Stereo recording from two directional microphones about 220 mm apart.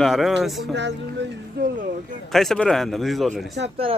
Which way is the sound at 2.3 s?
Centre (ahead or behind).